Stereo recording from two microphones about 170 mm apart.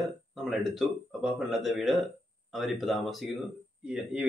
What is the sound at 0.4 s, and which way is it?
Speech, centre (ahead or behind).